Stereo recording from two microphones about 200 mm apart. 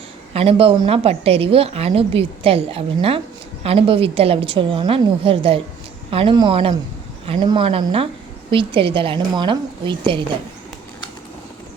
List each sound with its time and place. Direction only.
0.3 s a woman's voice: 30° right (ahead or behind)